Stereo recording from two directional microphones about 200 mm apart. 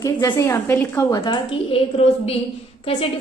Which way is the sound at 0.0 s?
15° left (ahead or behind).